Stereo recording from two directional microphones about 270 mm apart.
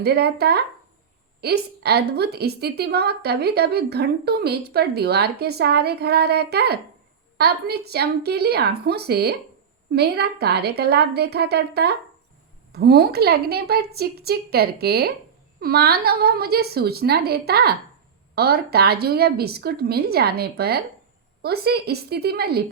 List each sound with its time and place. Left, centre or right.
0.0 s a woman's voice: right